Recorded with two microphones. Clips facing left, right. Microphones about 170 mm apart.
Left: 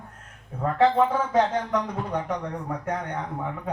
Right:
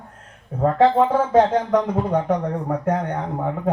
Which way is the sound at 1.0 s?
55° right (ahead or behind).